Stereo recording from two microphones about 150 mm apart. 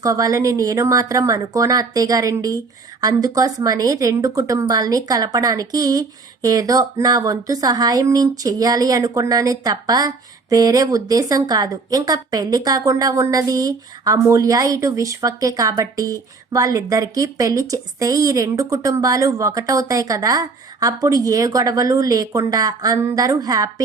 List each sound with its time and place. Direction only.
0.0 s a woman's voice: 20° right (ahead or behind)